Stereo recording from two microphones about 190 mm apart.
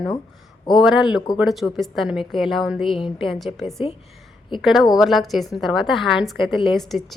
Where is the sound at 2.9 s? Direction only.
25° left (ahead or behind).